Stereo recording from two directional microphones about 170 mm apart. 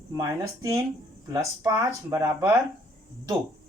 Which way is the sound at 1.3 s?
20° right (ahead or behind).